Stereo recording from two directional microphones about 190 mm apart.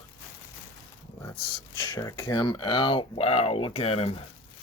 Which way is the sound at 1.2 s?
25° left (ahead or behind).